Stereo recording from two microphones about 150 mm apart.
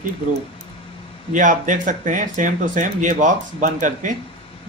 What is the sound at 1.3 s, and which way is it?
Speech, 60° right (ahead or behind).